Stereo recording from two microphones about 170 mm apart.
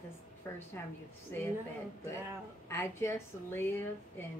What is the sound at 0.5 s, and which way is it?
Speech, 15° left (ahead or behind).